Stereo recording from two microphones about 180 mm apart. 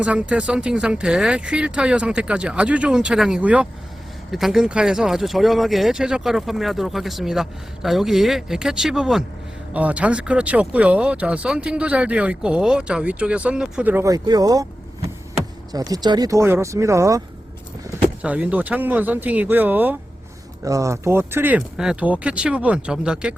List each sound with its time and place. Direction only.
0.0 s speech: 5° right (ahead or behind)
15.7 s speech: 20° right (ahead or behind)
18.2 s speech: 5° right (ahead or behind)